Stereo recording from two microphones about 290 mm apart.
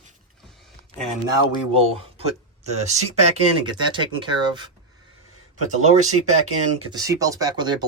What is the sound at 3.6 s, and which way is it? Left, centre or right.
Speech, centre.